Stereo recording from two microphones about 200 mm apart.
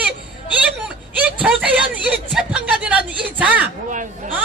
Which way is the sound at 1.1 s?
10° right (ahead or behind).